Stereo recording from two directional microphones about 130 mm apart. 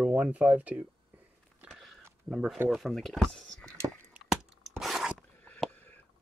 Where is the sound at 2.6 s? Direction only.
Centre (ahead or behind).